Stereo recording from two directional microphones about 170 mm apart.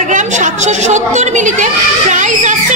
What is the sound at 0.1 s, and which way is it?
A woman's voice, 45° right (ahead or behind).